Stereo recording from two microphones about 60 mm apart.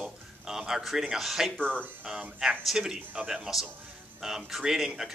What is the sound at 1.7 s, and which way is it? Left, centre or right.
Speech, right.